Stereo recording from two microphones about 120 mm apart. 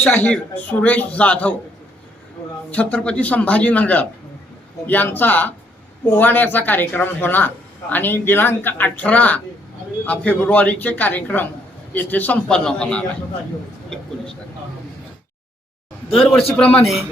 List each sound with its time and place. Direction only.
0.1 s speech: 15° left (ahead or behind)
2.6 s speech: 10° left (ahead or behind)
16.1 s a man's voice: centre (ahead or behind)